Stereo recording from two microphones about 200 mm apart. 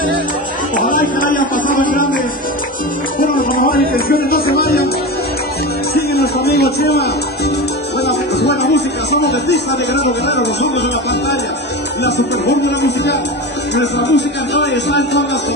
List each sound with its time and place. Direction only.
0.7 s a sound: 40° left (ahead or behind)
3.2 s music: 45° left (ahead or behind)
5.9 s speech: 55° left (ahead or behind)